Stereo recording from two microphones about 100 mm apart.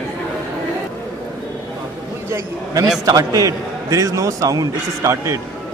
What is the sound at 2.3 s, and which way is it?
A man's voice, 30° right (ahead or behind).